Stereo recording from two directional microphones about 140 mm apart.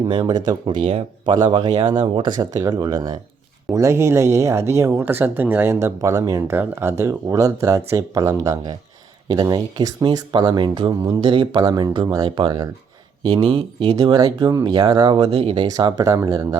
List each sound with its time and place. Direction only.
0.1 s speech: 35° right (ahead or behind)